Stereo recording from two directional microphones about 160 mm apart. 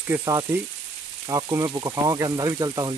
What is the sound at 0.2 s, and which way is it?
Speech, 20° right (ahead or behind).